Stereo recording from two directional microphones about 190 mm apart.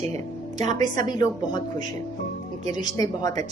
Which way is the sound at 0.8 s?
20° left (ahead or behind).